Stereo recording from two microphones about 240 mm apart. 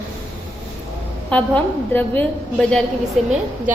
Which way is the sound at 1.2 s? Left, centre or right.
Centre.